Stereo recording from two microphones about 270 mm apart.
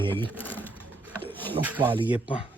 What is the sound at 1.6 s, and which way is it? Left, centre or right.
Speech, centre.